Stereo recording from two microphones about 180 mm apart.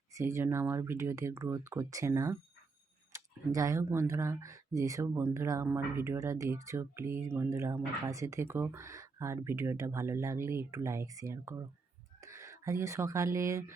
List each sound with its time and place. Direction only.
0.1 s speech: 15° right (ahead or behind)